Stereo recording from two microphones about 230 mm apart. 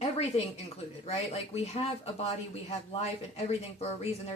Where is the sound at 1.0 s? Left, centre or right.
Left.